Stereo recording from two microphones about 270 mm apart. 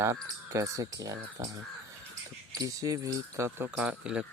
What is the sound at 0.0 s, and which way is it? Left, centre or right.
Speech, centre.